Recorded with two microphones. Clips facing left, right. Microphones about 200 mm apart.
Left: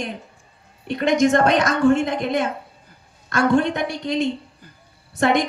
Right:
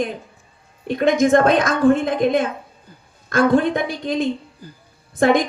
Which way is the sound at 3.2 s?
55° right (ahead or behind).